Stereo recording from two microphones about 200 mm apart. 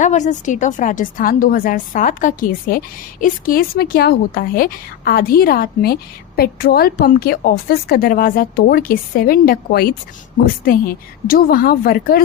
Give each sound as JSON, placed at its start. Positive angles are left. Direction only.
{"t": 0.0, "sound": "a woman's voice", "side_deg": 35}